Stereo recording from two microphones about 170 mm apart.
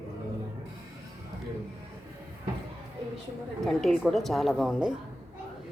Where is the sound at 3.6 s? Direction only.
5° left (ahead or behind).